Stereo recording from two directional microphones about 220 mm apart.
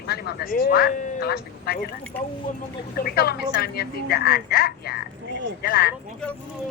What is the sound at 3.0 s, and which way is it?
Speech, 45° left (ahead or behind).